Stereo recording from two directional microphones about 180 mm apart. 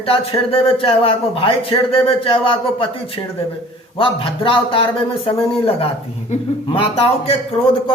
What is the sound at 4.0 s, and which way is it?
A man's voice, 30° left (ahead or behind).